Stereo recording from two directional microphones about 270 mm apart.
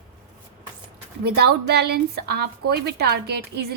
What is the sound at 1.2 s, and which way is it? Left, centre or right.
Speech, right.